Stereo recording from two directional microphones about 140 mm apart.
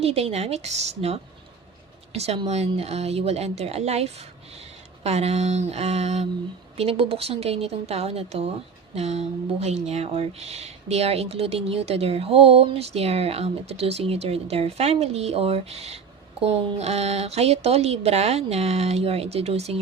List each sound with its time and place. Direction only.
0.0 s speech: 45° right (ahead or behind)